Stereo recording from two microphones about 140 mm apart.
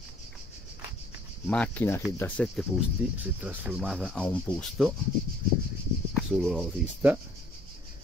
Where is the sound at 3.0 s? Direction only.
5° right (ahead or behind).